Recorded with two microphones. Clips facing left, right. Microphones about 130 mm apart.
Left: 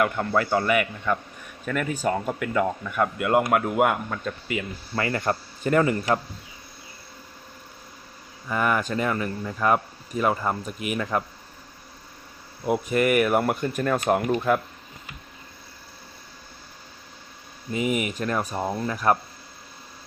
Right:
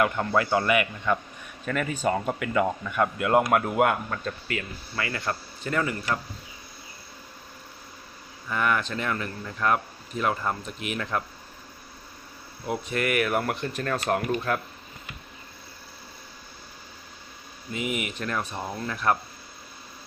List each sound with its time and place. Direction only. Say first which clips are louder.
0.0 s speech: left 1 dB; centre (ahead or behind)
4.9 s speech: left 5 dB; 40° left (ahead or behind)
8.5 s speech: left 3 dB; 5° left (ahead or behind)
12.6 s speech: left 6 dB; 10° left (ahead or behind)
17.7 s speech: left 5 dB; 40° left (ahead or behind)
18.6 s speech: left 5 dB; 25° left (ahead or behind)